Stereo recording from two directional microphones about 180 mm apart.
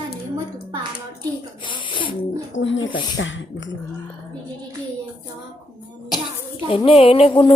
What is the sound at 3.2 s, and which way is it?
Speech, 90° left.